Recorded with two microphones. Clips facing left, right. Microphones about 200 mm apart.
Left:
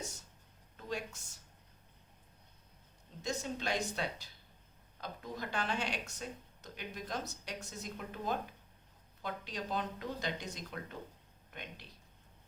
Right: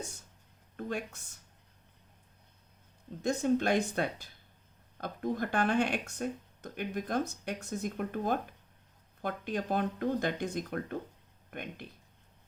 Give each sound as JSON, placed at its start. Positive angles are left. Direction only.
{"t": 0.8, "sound": "a woman's voice", "side_deg": -55}
{"t": 3.2, "sound": "a woman's voice", "side_deg": -55}